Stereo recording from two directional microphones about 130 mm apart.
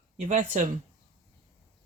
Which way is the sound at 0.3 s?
80° right.